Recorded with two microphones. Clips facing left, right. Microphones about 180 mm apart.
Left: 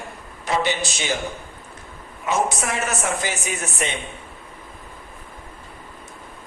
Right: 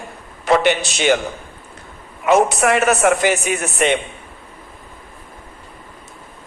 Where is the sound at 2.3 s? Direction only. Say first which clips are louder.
Right 9 dB; 65° right (ahead or behind).